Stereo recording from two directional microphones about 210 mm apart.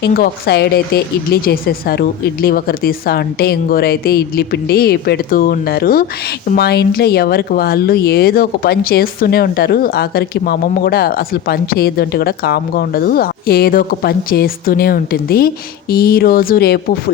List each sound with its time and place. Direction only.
0.0 s speech: 50° left (ahead or behind)